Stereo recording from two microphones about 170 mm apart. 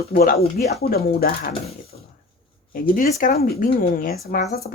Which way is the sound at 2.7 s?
55° left (ahead or behind).